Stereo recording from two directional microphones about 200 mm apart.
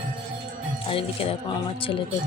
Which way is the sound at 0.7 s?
30° left (ahead or behind).